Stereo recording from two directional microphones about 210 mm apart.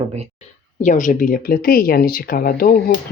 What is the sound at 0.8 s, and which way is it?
Speech, 35° left (ahead or behind).